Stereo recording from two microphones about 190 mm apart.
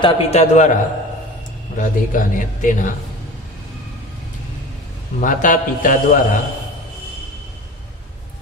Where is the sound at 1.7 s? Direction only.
45° left (ahead or behind).